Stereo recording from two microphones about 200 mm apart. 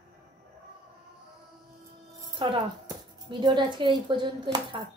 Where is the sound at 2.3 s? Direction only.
25° right (ahead or behind).